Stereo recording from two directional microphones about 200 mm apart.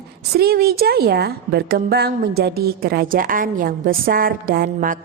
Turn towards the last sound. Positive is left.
turn(degrees=-45)  # may be behind; listen again after turning